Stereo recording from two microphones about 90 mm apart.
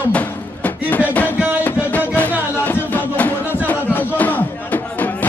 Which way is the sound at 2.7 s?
20° left (ahead or behind).